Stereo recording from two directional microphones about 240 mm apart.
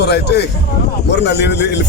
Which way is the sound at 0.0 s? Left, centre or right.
Left.